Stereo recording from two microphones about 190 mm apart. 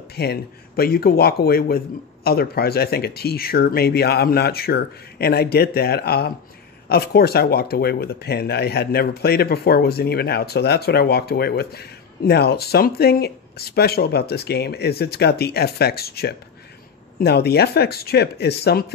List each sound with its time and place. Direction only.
0.1 s speech: 55° left (ahead or behind)